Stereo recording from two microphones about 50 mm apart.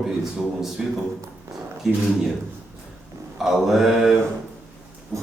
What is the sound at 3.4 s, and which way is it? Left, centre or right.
Speech, centre.